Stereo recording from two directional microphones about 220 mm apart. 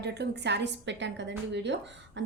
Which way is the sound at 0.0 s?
50° right (ahead or behind).